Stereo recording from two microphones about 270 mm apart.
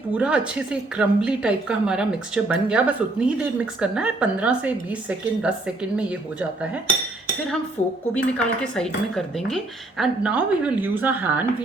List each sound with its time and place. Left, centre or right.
0.1 s speech: centre
7.8 s a woman's voice: left
8.1 s speech: centre